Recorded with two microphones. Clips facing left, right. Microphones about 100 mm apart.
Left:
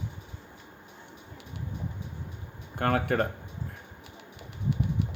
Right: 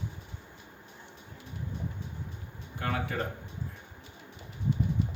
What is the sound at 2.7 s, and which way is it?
Speech, 55° left (ahead or behind).